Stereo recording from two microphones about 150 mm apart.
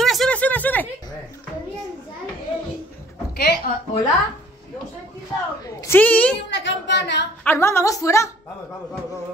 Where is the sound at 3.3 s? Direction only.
90° left.